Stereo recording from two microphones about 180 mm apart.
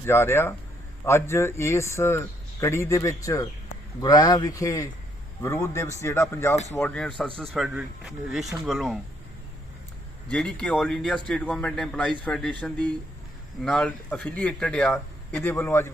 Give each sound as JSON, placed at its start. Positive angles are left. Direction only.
{"t": 0.0, "sound": "a man's voice", "side_deg": 15}
{"t": 10.2, "sound": "a man's voice", "side_deg": 5}